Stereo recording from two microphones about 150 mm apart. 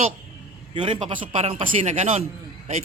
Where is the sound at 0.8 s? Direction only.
35° right (ahead or behind).